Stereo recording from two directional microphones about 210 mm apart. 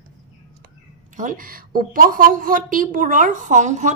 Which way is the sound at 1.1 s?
40° right (ahead or behind).